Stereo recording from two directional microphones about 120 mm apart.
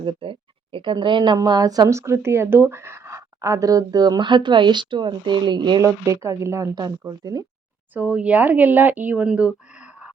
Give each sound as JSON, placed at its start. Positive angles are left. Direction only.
{"t": 0.0, "sound": "speech", "side_deg": -45}
{"t": 5.8, "sound": "speech", "side_deg": -25}
{"t": 7.9, "sound": "speech", "side_deg": -10}